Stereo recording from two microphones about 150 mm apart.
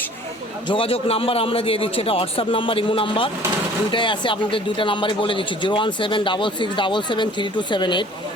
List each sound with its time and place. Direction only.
0.7 s speech: 40° left (ahead or behind)